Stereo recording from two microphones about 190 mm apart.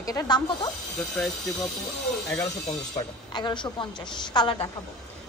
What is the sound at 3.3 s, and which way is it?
Speech, 25° left (ahead or behind).